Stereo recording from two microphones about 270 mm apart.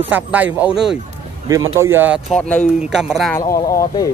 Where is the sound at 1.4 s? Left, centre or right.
Centre.